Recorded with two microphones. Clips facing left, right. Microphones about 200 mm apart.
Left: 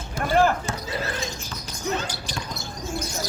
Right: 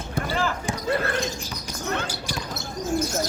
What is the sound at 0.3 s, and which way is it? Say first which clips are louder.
Basketball bounce: left 8 dB; 55° left (ahead or behind).